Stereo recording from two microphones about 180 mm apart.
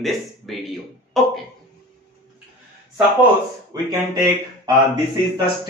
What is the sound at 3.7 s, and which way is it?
Speech, 20° right (ahead or behind).